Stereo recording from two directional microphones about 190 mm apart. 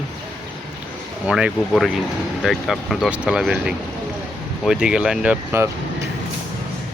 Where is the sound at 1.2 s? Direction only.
5° right (ahead or behind).